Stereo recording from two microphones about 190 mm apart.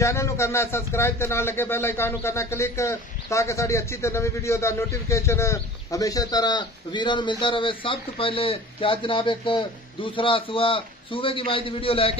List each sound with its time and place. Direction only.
0.0 s a man's voice: 15° left (ahead or behind)